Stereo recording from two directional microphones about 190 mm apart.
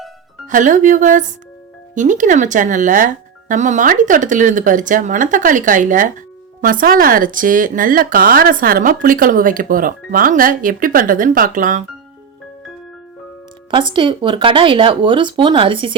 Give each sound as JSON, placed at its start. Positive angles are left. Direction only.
{"t": 0.4, "sound": "speech", "side_deg": -40}
{"t": 13.7, "sound": "speech", "side_deg": -25}